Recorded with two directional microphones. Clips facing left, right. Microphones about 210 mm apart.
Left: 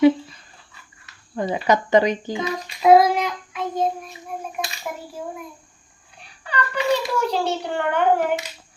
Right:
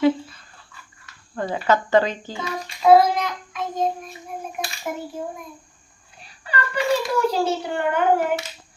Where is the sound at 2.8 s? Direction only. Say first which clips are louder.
Left 1 dB; 10° left (ahead or behind).